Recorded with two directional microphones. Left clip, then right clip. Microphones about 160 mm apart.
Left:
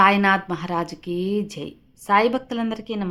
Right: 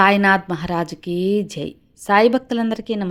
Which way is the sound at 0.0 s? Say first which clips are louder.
Right 2 dB; 25° right (ahead or behind).